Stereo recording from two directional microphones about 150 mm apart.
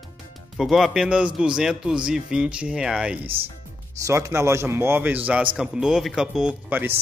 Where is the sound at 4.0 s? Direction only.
20° right (ahead or behind).